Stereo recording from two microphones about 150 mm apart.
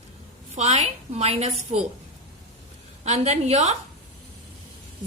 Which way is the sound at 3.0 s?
45° right (ahead or behind).